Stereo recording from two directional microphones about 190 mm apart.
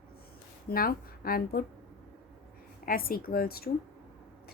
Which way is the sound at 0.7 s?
50° left (ahead or behind).